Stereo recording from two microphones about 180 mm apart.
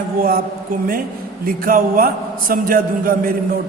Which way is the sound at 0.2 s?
50° right (ahead or behind).